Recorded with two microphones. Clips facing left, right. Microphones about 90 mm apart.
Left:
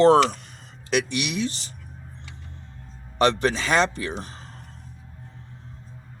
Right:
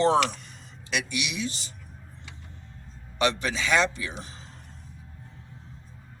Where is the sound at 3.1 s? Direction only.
40° left (ahead or behind).